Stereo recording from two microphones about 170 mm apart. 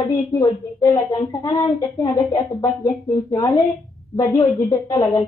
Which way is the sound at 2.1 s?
20° left (ahead or behind).